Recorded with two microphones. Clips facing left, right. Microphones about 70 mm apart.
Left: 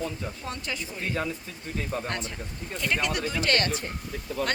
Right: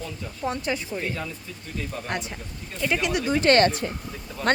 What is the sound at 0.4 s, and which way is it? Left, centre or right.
Speech, right.